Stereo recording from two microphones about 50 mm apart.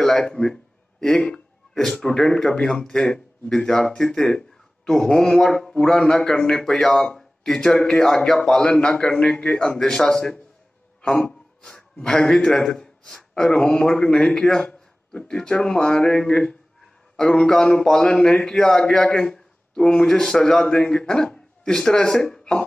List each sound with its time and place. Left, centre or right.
0.3 s a man's voice: centre